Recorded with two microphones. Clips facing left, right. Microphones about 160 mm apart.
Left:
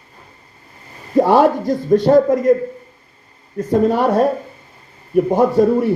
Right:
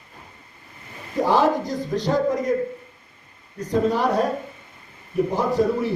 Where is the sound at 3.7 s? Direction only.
50° left (ahead or behind).